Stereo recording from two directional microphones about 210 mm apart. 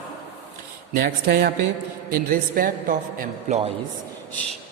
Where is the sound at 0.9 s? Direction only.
45° right (ahead or behind).